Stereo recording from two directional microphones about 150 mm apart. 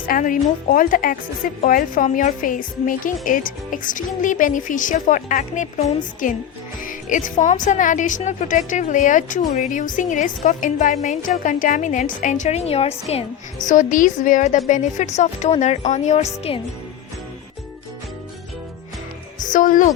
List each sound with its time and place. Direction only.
0.0 s a woman's voice: 65° left (ahead or behind); by 16.6 s 45° left (ahead or behind)
19.5 s a woman's voice: 60° left (ahead or behind)